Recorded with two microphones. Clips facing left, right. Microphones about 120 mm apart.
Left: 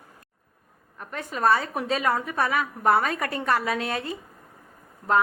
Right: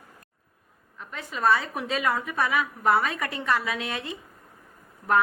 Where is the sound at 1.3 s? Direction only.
45° left (ahead or behind).